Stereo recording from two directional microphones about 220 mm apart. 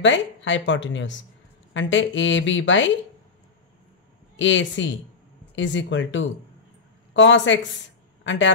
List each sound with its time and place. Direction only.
0.0 s speech: 55° left (ahead or behind)
4.4 s a man's voice: 55° left (ahead or behind)